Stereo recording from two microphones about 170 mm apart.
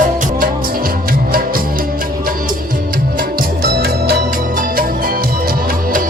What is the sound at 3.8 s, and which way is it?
Music, 65° right (ahead or behind).